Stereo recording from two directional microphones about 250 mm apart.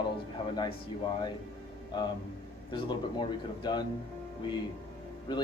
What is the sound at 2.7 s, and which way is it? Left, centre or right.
A man's voice, centre.